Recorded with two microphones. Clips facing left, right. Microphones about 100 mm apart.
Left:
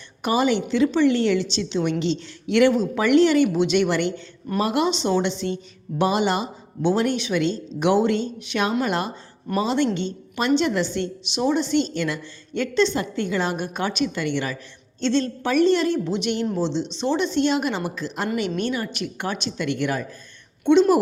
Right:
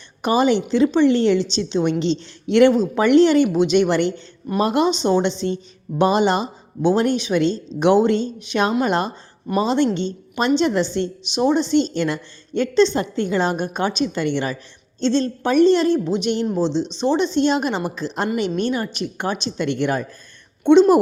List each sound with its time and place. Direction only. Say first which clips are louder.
0.2 s a woman's voice: right 3 dB; 25° right (ahead or behind)